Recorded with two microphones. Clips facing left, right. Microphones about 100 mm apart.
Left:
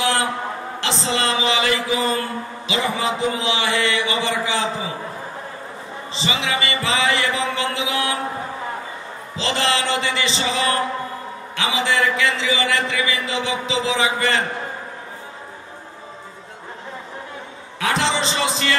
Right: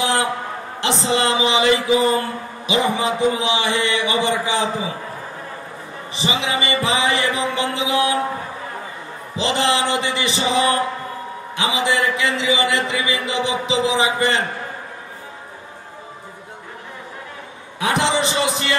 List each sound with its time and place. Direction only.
0.0 s a sound: 20° right (ahead or behind)
1.0 s a man's voice: 20° right (ahead or behind)
6.1 s a man's voice: 20° right (ahead or behind)
9.4 s a man's voice: 20° right (ahead or behind)
17.7 s speech: 20° right (ahead or behind)